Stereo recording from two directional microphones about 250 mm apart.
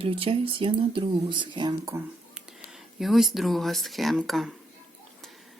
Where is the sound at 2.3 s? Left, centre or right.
Centre.